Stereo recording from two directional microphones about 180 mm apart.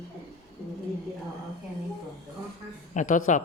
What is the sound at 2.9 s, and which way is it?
Speech, 45° left (ahead or behind).